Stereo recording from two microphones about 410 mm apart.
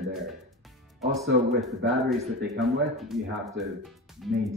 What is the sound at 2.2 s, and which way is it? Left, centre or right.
Speech, right.